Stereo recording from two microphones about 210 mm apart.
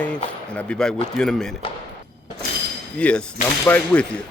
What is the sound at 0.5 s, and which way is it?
Speech, 5° left (ahead or behind).